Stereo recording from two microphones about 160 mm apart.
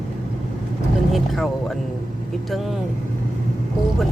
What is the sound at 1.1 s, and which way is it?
Speech, centre (ahead or behind).